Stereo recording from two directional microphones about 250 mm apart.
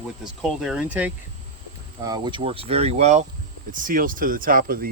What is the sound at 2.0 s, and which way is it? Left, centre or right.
Speech, centre.